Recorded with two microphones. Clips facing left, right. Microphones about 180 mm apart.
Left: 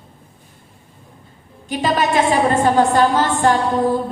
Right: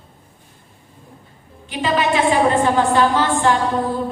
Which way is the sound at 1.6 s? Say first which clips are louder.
Left 1 dB; 40° left (ahead or behind).